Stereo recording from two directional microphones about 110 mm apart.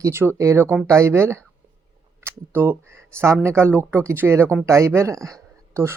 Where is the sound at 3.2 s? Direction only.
25° right (ahead or behind).